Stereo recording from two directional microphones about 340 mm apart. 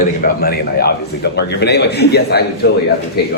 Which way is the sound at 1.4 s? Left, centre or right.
Left.